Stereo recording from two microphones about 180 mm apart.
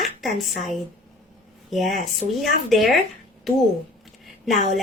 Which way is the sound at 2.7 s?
Centre (ahead or behind).